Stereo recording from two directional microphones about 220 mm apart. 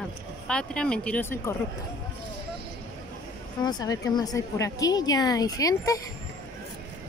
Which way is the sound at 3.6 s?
20° left (ahead or behind).